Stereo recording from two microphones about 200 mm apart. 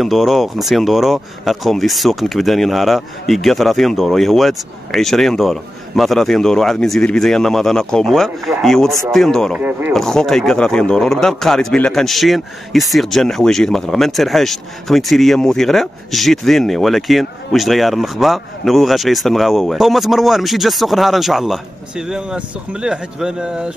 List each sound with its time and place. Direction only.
0.0 s speech: centre (ahead or behind)